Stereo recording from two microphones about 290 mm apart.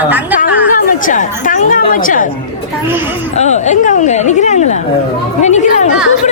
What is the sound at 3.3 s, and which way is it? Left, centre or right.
Speech, left.